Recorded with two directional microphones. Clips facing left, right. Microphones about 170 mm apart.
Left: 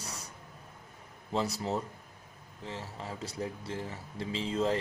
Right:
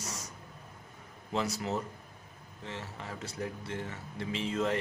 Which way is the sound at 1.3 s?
35° left (ahead or behind).